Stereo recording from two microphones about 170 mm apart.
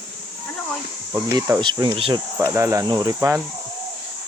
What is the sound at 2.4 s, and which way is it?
Speech, 15° right (ahead or behind).